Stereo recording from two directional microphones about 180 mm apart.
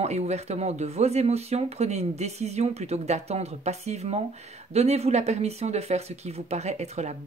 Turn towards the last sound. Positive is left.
turn(degrees=-40)  # may be behind; listen again after turning